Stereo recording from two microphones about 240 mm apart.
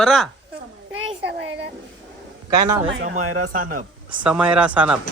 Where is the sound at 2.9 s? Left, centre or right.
Right.